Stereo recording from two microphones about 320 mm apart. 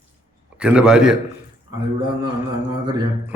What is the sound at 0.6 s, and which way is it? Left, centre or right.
Speech, centre.